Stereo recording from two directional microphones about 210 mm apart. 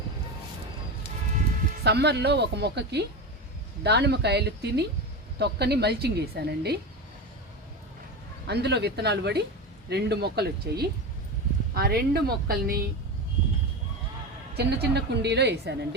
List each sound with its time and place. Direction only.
1.8 s a woman's voice: 50° right (ahead or behind)
8.4 s a woman's voice: 50° right (ahead or behind)
14.5 s a woman's voice: 50° right (ahead or behind)